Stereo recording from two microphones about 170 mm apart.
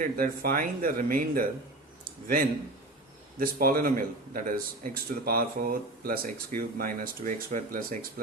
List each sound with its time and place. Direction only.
0.0 s speech: 55° right (ahead or behind)
2.0 s a sound: 55° right (ahead or behind)
3.3 s speech: 60° right (ahead or behind)